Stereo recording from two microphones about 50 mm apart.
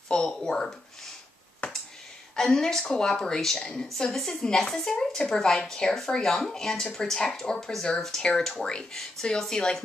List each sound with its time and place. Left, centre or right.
0.1 s speech: centre
1.6 s a sound: left
2.3 s speech: centre